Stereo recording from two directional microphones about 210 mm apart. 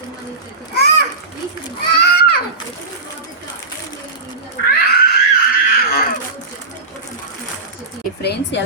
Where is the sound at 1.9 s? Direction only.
50° left (ahead or behind).